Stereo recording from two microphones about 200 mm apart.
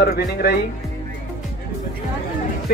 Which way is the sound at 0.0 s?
50° left (ahead or behind).